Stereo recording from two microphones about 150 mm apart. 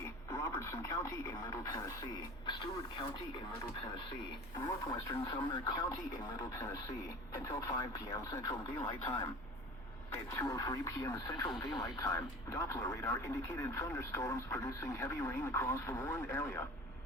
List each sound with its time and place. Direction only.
0.3 s speech: 20° left (ahead or behind)
4.6 s speech: 25° left (ahead or behind)
10.3 s speech: 25° left (ahead or behind)